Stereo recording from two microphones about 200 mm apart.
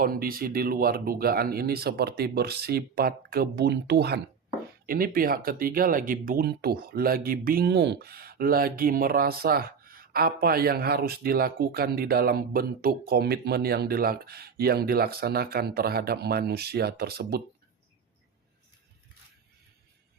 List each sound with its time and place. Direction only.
0.0 s speech: 45° right (ahead or behind)